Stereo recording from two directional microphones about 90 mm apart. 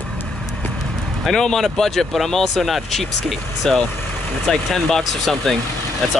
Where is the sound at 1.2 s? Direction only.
5° left (ahead or behind).